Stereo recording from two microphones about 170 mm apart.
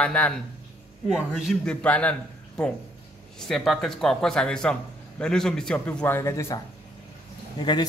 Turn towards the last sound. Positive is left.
turn(degrees=25)  # may be behind; listen again after turning